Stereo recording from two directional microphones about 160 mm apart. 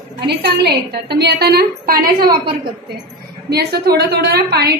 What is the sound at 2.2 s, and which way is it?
Speech, 30° right (ahead or behind).